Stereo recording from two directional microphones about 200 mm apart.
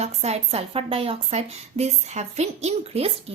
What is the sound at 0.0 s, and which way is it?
A woman's voice, 30° right (ahead or behind).